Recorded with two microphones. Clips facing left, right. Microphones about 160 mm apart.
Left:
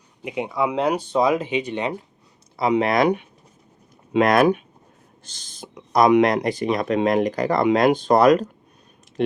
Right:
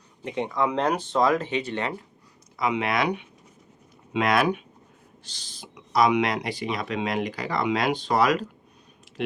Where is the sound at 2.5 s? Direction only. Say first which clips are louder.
Left 6 dB; 35° left (ahead or behind).